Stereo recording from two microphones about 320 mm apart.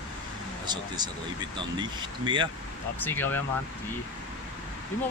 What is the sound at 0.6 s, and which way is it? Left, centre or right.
Speech, centre.